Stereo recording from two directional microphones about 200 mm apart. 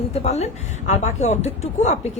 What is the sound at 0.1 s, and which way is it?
A woman's voice, 30° left (ahead or behind).